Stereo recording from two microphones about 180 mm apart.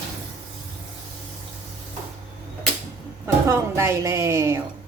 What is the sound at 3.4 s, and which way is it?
A woman's voice, 15° right (ahead or behind).